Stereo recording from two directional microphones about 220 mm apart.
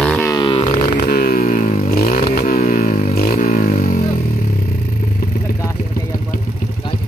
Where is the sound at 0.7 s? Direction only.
35° left (ahead or behind).